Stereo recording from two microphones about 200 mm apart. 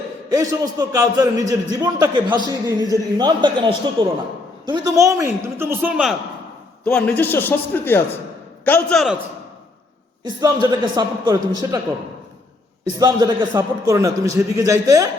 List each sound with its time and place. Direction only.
0.3 s a man's voice: 15° right (ahead or behind)
6.8 s a man's voice: 5° left (ahead or behind)
10.2 s a man's voice: 20° right (ahead or behind)
13.0 s a man's voice: 20° right (ahead or behind)